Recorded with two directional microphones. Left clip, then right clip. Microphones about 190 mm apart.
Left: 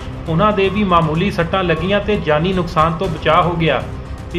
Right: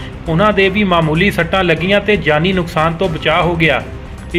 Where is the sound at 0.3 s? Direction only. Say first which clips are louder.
Right 3 dB; 20° right (ahead or behind).